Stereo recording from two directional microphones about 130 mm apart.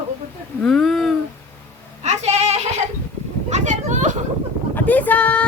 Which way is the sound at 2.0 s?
60° right (ahead or behind).